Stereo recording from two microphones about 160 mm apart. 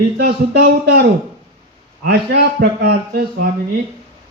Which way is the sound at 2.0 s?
80° right.